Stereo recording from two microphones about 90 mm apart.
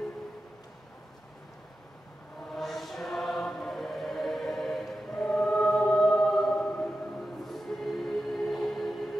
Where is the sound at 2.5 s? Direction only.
Centre (ahead or behind).